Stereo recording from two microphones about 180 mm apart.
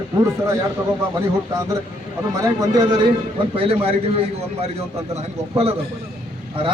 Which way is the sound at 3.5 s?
35° right (ahead or behind).